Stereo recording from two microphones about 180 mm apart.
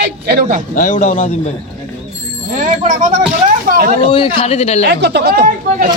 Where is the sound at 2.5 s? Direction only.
45° right (ahead or behind).